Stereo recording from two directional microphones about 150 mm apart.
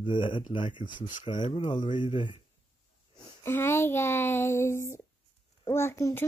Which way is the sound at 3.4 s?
15° left (ahead or behind).